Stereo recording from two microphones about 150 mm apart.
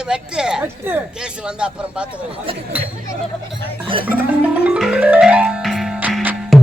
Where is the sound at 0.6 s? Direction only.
15° right (ahead or behind).